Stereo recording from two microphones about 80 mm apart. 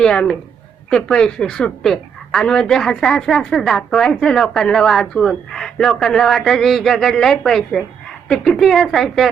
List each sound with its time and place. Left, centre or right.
0.0 s a woman's voice: centre